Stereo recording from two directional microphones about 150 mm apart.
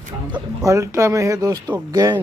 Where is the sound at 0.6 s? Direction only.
20° right (ahead or behind).